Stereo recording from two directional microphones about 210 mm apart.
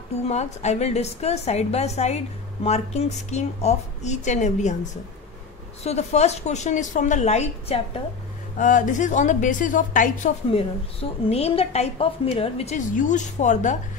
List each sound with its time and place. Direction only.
0.3 s a woman's voice: 30° left (ahead or behind)
5.9 s a woman's voice: 30° left (ahead or behind)